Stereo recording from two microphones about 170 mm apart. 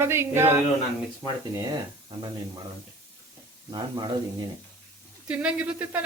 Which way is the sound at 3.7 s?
25° right (ahead or behind).